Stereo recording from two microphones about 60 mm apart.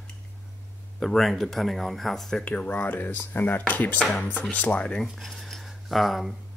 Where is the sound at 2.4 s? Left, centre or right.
Left.